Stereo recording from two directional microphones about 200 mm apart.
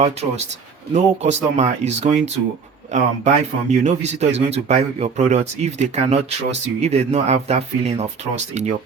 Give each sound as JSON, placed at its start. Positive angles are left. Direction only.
{"t": 0.0, "sound": "a man's voice", "side_deg": -35}